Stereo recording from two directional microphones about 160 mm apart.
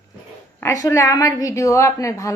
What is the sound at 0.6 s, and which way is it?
A woman's voice, 20° left (ahead or behind).